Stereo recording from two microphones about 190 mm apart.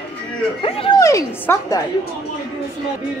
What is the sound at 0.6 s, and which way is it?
Speech, 25° left (ahead or behind).